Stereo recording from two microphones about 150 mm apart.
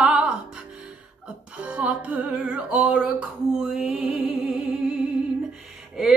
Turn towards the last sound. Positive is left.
turn(degrees=-5)  # may be behind; listen again after turning